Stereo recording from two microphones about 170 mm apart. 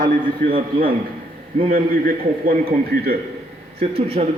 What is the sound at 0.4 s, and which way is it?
A man's voice, 55° right (ahead or behind).